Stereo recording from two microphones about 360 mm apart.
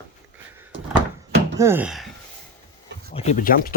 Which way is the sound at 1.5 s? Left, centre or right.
Centre.